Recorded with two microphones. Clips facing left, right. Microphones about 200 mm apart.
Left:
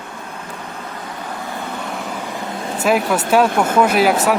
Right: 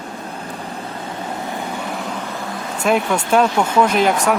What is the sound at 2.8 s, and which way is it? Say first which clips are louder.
Speech: left 1 dB; 5° left (ahead or behind).